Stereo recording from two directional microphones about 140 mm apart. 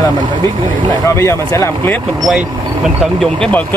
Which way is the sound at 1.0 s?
20° left (ahead or behind).